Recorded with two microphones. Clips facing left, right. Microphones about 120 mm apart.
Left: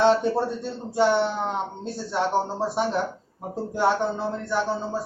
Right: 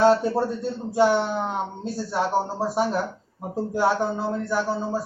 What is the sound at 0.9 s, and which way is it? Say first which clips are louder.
Speech: right 1 dB; 10° right (ahead or behind).